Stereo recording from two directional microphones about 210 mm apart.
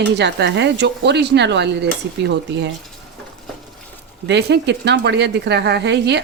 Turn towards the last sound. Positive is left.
turn(degrees=-55)  # may be behind; listen again after turning